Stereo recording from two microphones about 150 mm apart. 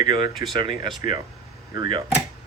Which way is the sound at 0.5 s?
35° right (ahead or behind).